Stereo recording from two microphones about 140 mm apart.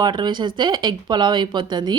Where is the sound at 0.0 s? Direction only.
35° right (ahead or behind).